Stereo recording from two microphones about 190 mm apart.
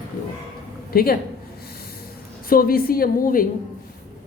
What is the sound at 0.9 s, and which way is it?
Speech, 50° left (ahead or behind).